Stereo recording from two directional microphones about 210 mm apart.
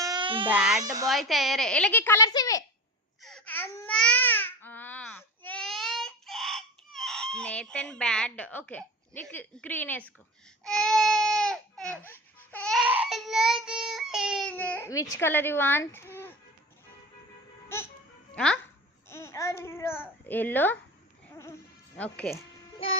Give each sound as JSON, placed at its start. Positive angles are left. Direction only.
{"t": 0.0, "sound": "baby cry", "side_deg": -20}
{"t": 0.4, "sound": "speech", "side_deg": -5}
{"t": 3.2, "sound": "babbling", "side_deg": 5}
{"t": 10.6, "sound": "baby cry", "side_deg": 0}
{"t": 15.1, "sound": "a child's voice", "side_deg": 10}
{"t": 17.7, "sound": "a child's voice", "side_deg": 10}
{"t": 21.9, "sound": "a child's voice", "side_deg": 5}